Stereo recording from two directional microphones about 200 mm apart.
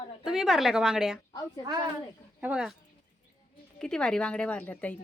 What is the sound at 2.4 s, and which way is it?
Speech, 5° right (ahead or behind).